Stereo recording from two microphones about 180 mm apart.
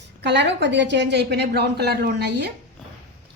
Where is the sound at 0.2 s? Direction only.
75° right (ahead or behind).